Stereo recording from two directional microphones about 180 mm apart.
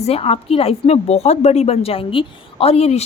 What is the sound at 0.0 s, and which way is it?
A woman's voice, 35° left (ahead or behind).